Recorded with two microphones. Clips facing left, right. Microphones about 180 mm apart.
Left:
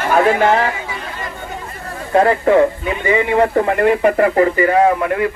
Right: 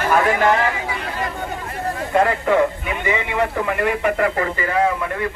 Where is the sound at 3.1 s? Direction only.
50° left (ahead or behind).